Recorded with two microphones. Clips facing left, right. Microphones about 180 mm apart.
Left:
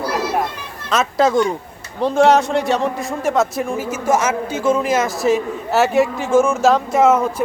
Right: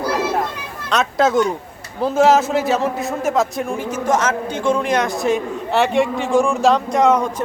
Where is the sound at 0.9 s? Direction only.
Centre (ahead or behind).